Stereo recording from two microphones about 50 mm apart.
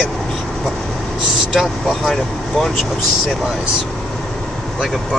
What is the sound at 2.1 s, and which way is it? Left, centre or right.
Speech, centre.